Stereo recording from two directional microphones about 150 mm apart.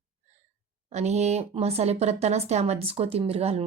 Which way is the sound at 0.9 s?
50° right (ahead or behind).